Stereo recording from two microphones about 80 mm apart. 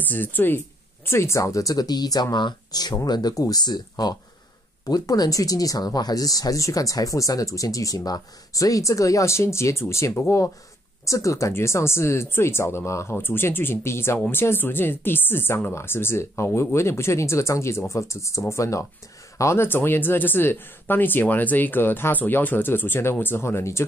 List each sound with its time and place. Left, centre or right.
0.1 s speech: left